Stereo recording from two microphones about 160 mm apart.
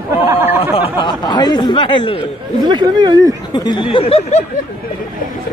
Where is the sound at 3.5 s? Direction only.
25° left (ahead or behind).